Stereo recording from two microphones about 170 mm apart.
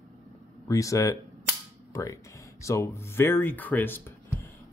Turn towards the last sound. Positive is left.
turn(degrees=10)  # may be behind; listen again after turning